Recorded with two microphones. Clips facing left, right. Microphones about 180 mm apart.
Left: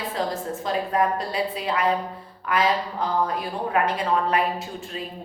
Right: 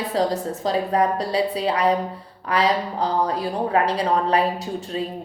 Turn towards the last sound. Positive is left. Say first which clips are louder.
# right 5 dB
turn(degrees=-35)  # may be behind; listen again after turning